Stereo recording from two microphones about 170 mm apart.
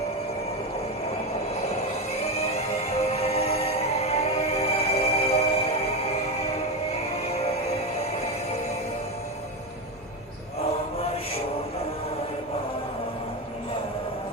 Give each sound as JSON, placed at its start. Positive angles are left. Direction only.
{"t": 2.3, "sound": "music", "side_deg": 35}